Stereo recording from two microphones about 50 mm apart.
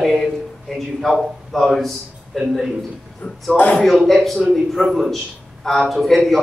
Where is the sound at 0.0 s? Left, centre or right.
Centre.